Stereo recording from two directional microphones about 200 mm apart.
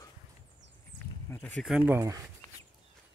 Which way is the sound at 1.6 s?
5° right (ahead or behind).